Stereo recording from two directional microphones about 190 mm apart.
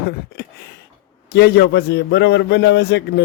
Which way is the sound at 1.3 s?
60° left (ahead or behind).